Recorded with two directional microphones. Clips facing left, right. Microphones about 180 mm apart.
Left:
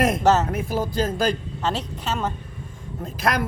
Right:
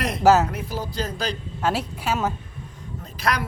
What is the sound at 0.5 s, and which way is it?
Speech, 50° left (ahead or behind).